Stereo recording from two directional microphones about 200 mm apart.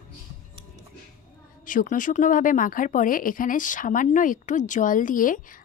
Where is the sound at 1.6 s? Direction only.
40° left (ahead or behind).